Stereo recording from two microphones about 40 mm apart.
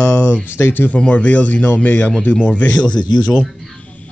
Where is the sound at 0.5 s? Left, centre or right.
Left.